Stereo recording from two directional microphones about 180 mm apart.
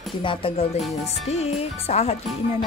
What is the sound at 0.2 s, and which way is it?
Speech, 30° left (ahead or behind).